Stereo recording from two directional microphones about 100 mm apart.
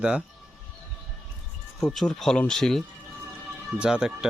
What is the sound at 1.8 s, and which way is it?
Speech, 5° left (ahead or behind).